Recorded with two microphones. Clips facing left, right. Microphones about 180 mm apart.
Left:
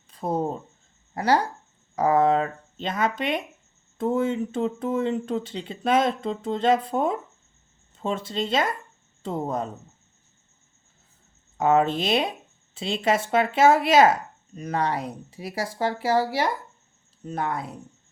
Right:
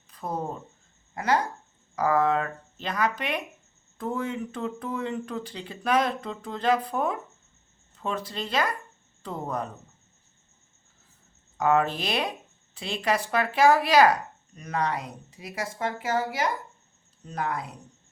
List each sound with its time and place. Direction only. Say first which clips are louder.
0.1 s speech: left 6 dB; 30° left (ahead or behind)
11.5 s speech: left 3 dB; 25° left (ahead or behind)